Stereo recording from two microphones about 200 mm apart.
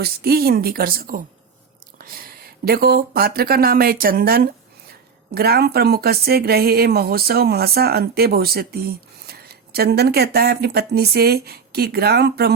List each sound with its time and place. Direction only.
0.0 s speech: 50° right (ahead or behind)